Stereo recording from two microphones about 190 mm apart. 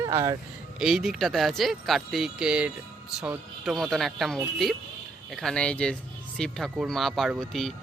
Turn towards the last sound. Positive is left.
turn(degrees=0)  # may be behind; listen again after turning